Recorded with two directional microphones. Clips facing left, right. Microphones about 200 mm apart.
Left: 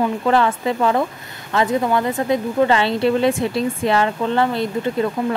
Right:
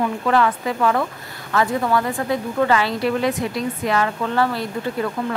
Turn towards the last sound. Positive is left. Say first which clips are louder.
# left 4 dB
turn(degrees=25)  # may be behind; listen again after turning